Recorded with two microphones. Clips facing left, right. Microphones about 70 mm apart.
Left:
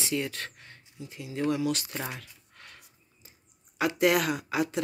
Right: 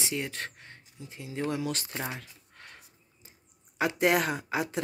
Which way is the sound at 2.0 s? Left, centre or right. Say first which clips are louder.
Even; right.